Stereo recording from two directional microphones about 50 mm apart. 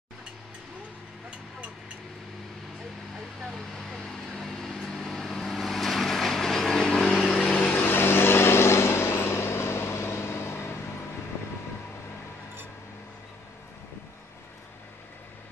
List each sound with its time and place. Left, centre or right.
3.4 s vehicle: centre
7.8 s vehicle: left